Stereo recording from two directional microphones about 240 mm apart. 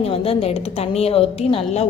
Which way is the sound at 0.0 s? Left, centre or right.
Left.